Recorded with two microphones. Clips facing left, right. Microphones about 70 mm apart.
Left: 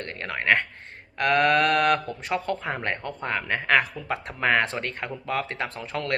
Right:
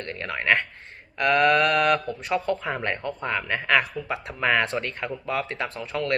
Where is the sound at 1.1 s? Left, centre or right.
Left.